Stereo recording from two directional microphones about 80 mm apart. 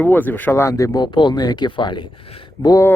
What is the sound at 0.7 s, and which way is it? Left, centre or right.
Speech, left.